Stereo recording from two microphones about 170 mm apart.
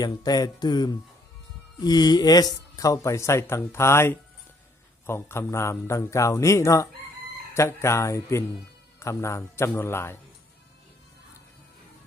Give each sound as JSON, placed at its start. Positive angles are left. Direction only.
{"t": 0.0, "sound": "speech", "side_deg": 25}